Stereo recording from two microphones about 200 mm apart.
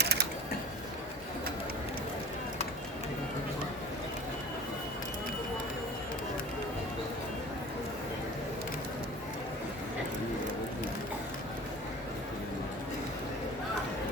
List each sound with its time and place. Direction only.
0.0 s mechanisms: 55° right (ahead or behind)